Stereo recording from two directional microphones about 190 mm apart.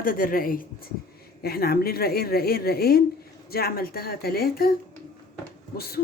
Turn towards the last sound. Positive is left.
turn(degrees=55)  # may be behind; listen again after turning